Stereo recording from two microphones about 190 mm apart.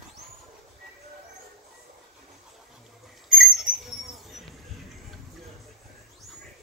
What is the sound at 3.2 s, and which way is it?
Rodents, centre (ahead or behind).